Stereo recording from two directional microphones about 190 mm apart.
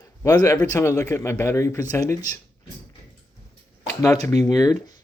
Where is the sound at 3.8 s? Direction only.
15° left (ahead or behind).